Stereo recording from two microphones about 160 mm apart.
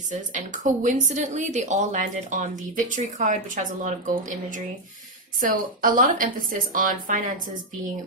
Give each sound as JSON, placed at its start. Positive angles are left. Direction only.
{"t": 0.1, "sound": "speech", "side_deg": -50}